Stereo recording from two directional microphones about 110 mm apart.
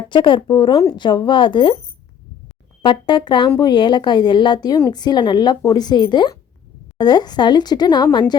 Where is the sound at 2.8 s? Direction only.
45° left (ahead or behind).